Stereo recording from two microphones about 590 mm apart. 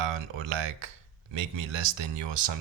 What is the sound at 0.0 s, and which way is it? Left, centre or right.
Speech, right.